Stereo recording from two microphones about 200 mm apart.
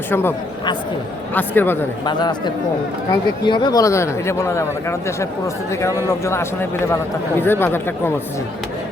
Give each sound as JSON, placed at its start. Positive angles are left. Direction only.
{"t": 0.1, "sound": "speech", "side_deg": 10}
{"t": 2.0, "sound": "speech", "side_deg": 20}